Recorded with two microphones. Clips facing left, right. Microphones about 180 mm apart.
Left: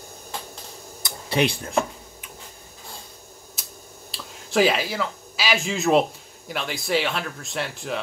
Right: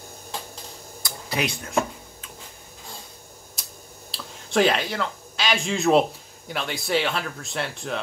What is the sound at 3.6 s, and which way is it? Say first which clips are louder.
Finger snapping: right 1 dB; centre (ahead or behind).